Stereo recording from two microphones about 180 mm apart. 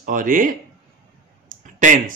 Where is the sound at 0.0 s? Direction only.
50° right (ahead or behind).